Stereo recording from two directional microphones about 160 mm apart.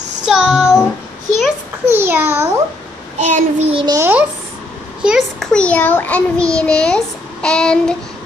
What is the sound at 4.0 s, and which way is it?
Speech, 10° right (ahead or behind).